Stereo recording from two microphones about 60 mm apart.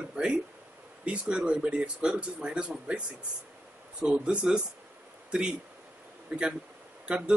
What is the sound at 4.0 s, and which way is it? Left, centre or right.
Speech, centre.